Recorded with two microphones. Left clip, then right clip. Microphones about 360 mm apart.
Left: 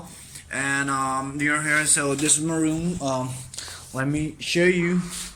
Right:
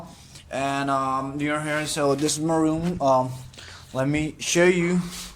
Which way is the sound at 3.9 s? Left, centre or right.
Centre.